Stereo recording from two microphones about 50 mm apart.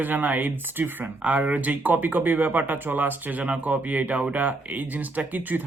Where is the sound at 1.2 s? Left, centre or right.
Right.